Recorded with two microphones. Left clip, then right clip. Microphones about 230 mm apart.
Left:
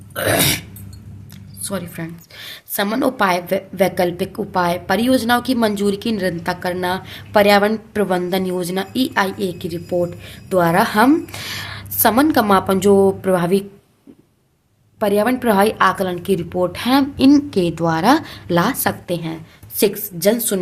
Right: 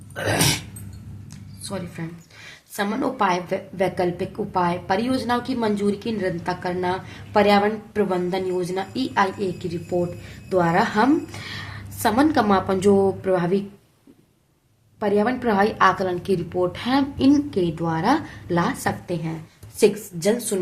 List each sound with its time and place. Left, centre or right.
0.1 s burping: left
1.6 s a woman's voice: left
14.9 s a woman's voice: left